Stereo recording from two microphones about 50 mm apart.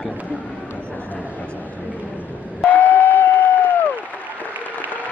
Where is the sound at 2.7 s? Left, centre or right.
Left.